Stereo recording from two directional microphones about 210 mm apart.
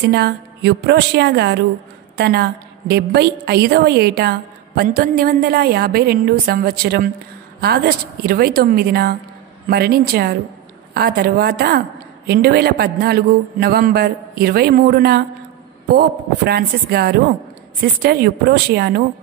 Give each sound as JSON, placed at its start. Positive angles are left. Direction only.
{"t": 0.1, "sound": "a woman's voice", "side_deg": -50}